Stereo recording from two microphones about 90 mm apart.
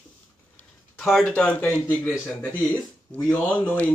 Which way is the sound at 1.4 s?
20° left (ahead or behind).